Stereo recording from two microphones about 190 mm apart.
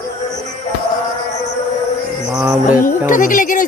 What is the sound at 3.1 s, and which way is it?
Speech, 45° left (ahead or behind).